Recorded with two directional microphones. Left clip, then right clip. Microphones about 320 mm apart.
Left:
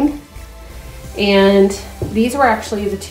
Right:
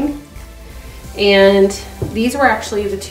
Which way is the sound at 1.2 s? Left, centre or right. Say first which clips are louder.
Right 2 dB; centre.